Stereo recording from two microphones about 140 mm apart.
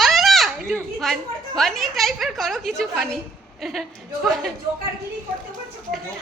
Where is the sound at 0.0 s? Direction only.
Centre (ahead or behind).